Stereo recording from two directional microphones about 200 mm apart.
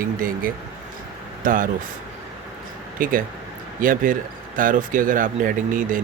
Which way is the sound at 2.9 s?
45° right (ahead or behind).